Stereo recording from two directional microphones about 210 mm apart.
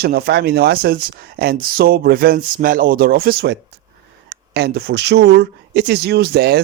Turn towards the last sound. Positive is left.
turn(degrees=-50)  # may be behind; listen again after turning